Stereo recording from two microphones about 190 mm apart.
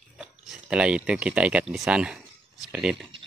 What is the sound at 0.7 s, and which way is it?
Speech, 5° right (ahead or behind).